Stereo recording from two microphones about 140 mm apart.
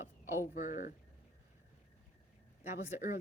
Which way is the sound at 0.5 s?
70° left (ahead or behind).